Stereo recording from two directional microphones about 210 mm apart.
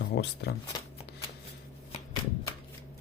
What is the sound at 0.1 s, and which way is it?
Speech, 50° left (ahead or behind).